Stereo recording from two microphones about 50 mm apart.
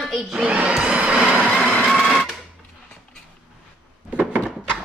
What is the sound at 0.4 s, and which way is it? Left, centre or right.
Crowd, right.